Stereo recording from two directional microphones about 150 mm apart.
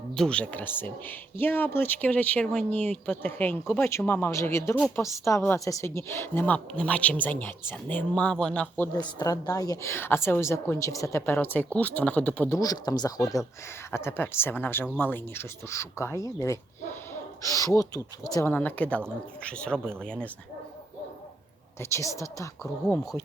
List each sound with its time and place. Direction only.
0.1 s a woman's voice: 5° left (ahead or behind)
9.0 s a woman's voice: 25° left (ahead or behind); by 12.5 s 10° left (ahead or behind)
12.5 s a woman's voice: 25° left (ahead or behind)
18.5 s a woman's voice: 10° left (ahead or behind)
21.8 s speech: 20° left (ahead or behind)